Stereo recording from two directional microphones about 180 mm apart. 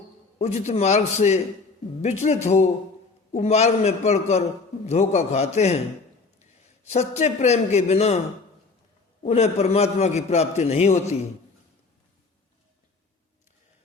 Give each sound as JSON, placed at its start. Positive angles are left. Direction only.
{"t": 0.3, "sound": "a man's voice", "side_deg": 35}
{"t": 6.8, "sound": "a man's voice", "side_deg": 35}
{"t": 9.2, "sound": "a man's voice", "side_deg": 40}